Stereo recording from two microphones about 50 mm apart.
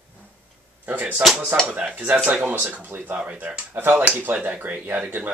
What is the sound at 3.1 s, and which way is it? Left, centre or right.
Speech, right.